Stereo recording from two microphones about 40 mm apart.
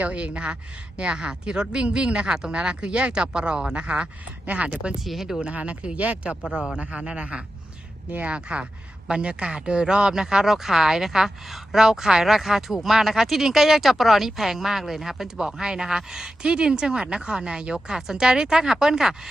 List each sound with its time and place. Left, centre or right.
0.0 s speech: right
4.4 s speech: right
4.9 s speech: centre
5.4 s speech: right; by 19.3 s centre